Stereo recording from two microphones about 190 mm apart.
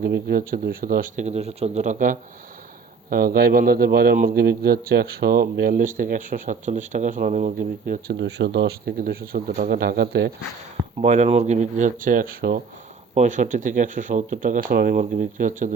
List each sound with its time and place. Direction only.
0.0 s speech: 55° right (ahead or behind)
8.1 s speech: 70° right (ahead or behind)
11.0 s speech: 35° right (ahead or behind)